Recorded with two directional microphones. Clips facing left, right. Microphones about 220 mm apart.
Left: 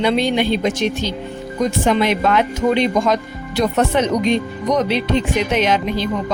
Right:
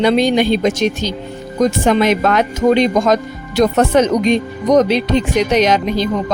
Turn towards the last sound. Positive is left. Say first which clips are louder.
# right 3 dB
turn(degrees=-40)  # may be behind; listen again after turning